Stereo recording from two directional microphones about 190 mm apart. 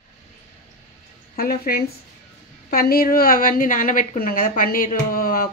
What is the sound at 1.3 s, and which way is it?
A woman's voice, 50° left (ahead or behind).